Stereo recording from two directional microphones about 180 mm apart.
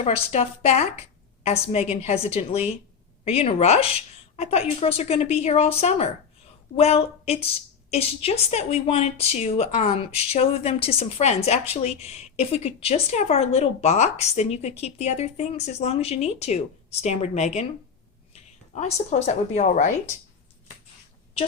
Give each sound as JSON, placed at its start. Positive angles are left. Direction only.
{"t": 0.0, "sound": "a woman's voice", "side_deg": 35}